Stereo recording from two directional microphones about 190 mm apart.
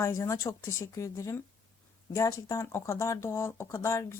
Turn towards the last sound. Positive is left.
turn(degrees=15)  # may be behind; listen again after turning